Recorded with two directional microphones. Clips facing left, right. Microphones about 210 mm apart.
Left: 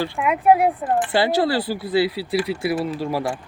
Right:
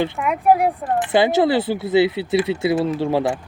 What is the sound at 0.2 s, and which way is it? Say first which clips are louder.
Speech: left 2 dB; centre (ahead or behind).